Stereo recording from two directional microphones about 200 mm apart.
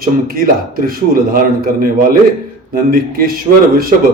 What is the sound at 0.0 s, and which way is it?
A man's voice, 45° right (ahead or behind).